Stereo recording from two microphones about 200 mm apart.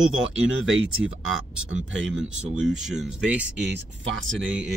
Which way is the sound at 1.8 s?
70° right (ahead or behind).